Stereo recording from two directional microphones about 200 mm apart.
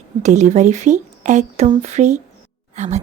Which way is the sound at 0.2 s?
35° right (ahead or behind).